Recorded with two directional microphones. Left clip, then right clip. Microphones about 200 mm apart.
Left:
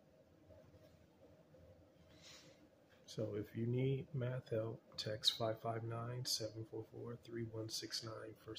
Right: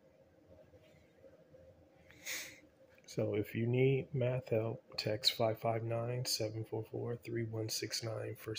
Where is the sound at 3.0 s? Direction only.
40° right (ahead or behind).